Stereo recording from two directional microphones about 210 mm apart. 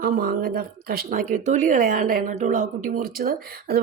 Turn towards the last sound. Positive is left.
turn(degrees=-45)  # may be behind; listen again after turning